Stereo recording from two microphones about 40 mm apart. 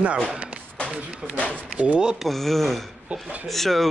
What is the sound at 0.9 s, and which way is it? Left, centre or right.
Speech, right.